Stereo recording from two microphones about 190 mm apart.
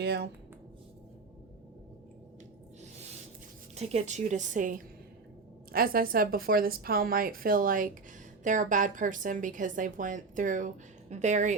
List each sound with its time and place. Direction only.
0.0 s speech: 60° right (ahead or behind)
3.8 s a woman's voice: 35° right (ahead or behind)